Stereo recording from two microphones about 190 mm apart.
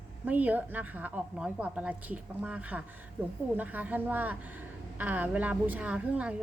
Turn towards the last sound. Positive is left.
turn(degrees=-5)  # may be behind; listen again after turning